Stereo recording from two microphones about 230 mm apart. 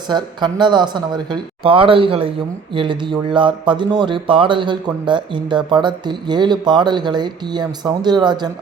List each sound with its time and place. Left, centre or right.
0.1 s speech: centre